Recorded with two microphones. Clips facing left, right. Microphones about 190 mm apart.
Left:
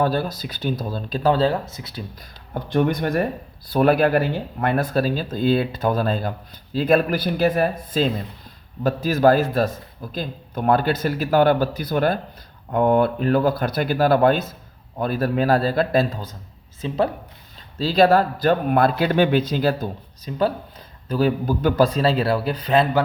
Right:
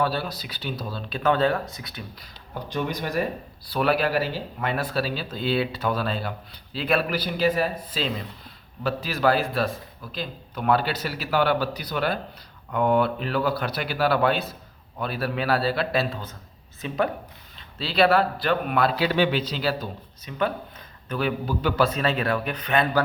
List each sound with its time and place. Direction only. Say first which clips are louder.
0.0 s a man's voice: left 4 dB; 45° left (ahead or behind)
1.2 s speech: left 3 dB; 30° left (ahead or behind)
2.6 s a man's voice: left 8 dB; 55° left (ahead or behind)
16.8 s speech: left 5 dB; 30° left (ahead or behind)
17.7 s a man's voice: left 4 dB; 40° left (ahead or behind)
21.9 s speech: left 5 dB; 30° left (ahead or behind)